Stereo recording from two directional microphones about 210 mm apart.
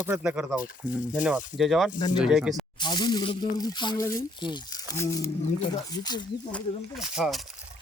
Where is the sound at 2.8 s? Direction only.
20° left (ahead or behind).